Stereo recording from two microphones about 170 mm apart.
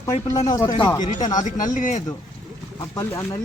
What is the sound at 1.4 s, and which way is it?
Speech, 50° left (ahead or behind).